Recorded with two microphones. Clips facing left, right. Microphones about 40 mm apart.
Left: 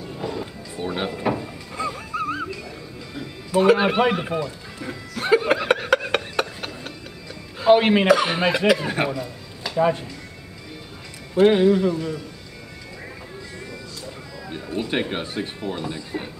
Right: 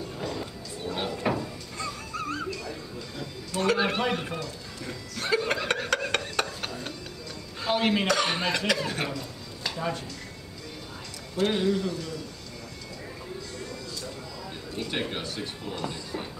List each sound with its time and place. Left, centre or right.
0.2 s music: centre
7.7 s speech: left
8.1 s speech: centre
9.8 s speech: left
11.3 s speech: left
14.5 s speech: left